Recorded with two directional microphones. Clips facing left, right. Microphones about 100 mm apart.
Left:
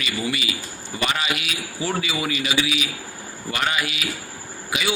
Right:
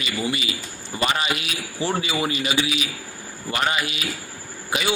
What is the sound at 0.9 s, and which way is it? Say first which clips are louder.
A man's voice: right 1 dB; 35° right (ahead or behind).